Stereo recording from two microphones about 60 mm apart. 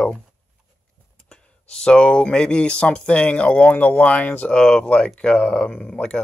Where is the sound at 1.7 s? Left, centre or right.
Centre.